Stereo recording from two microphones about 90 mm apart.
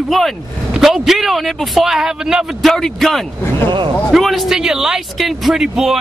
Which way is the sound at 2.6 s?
5° left (ahead or behind).